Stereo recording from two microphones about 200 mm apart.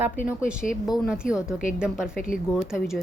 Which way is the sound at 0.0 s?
5° right (ahead or behind).